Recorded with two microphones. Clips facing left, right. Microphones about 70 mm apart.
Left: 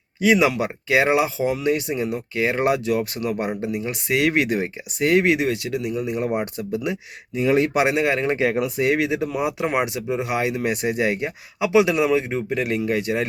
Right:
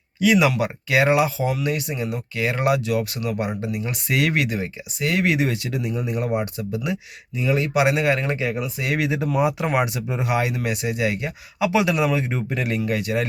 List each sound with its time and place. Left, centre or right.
0.2 s speech: left
3.8 s speech: centre
4.4 s speech: left
5.4 s speech: centre
6.1 s speech: centre
7.3 s speech: left
7.8 s speech: left
8.4 s speech: left
9.0 s speech: centre
10.7 s speech: left
11.6 s speech: centre
12.3 s speech: centre
12.9 s speech: left